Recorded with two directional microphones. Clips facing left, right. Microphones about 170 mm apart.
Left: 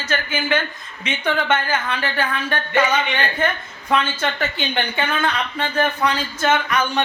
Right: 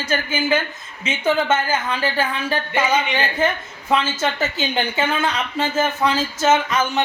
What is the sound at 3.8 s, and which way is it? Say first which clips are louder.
Speech: right 1 dB; 25° right (ahead or behind).